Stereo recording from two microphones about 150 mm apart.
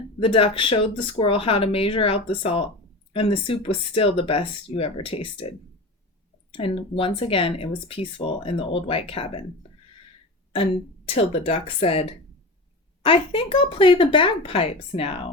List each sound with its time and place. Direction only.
0.2 s speech: 40° left (ahead or behind)
10.5 s speech: 40° left (ahead or behind)